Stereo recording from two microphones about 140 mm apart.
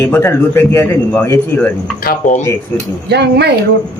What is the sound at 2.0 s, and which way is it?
Speech, 75° left (ahead or behind).